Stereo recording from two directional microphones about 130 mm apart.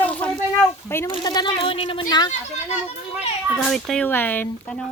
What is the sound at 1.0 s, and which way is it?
Speech, 35° left (ahead or behind).